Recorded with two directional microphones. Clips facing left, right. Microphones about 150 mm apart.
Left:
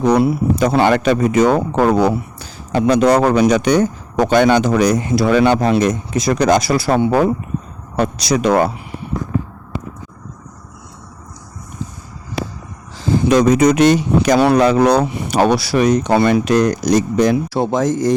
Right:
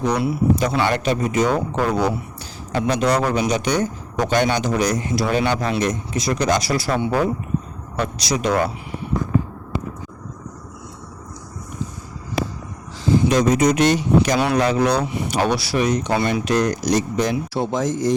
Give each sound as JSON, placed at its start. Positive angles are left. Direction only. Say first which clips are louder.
{"t": 0.0, "sound": "speech", "louder": "left 6 dB", "side_deg": 50}
{"t": 13.2, "sound": "speech", "louder": "left 7 dB", "side_deg": 55}
{"t": 14.3, "sound": "speech", "louder": "left 6 dB", "side_deg": 35}